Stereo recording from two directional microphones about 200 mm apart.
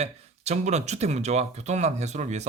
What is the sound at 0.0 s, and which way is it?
Speech, 35° right (ahead or behind).